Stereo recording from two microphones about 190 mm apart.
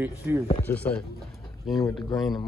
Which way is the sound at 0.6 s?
10° left (ahead or behind).